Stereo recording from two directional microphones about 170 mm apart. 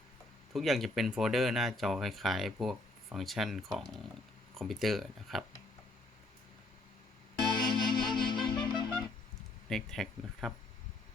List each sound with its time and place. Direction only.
0.5 s speech: centre (ahead or behind)
7.4 s music: 25° left (ahead or behind)
9.6 s speech: centre (ahead or behind)